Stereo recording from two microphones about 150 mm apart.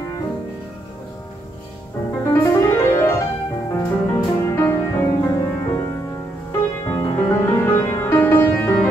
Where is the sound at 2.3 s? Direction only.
20° left (ahead or behind).